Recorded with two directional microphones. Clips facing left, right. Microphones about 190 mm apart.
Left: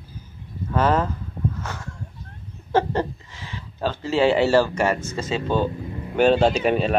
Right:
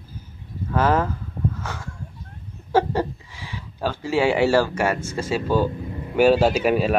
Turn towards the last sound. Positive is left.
turn(degrees=-5)  # may be behind; listen again after turning